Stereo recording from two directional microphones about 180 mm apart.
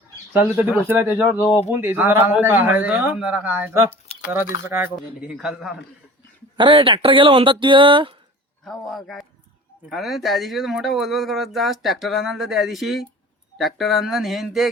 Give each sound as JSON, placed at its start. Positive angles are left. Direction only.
{"t": 0.4, "sound": "speech", "side_deg": -10}
{"t": 1.4, "sound": "speech", "side_deg": 30}
{"t": 1.7, "sound": "speech", "side_deg": -10}
{"t": 6.6, "sound": "speech", "side_deg": -25}
{"t": 8.6, "sound": "speech", "side_deg": 0}